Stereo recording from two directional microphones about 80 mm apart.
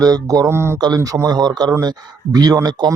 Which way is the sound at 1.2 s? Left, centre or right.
Right.